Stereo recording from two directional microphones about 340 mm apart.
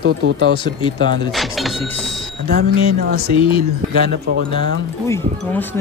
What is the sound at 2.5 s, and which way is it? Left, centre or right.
Speech, right.